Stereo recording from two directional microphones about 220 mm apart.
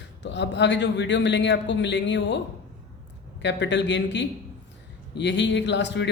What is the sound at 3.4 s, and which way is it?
Speech, 50° left (ahead or behind).